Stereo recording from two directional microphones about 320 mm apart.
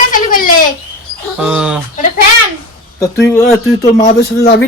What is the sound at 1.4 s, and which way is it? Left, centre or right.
Speech, centre.